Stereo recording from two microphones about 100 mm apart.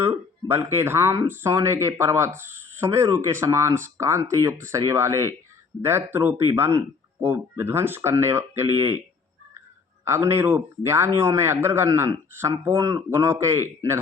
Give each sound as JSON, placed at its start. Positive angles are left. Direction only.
{"t": 0.0, "sound": "speech", "side_deg": -25}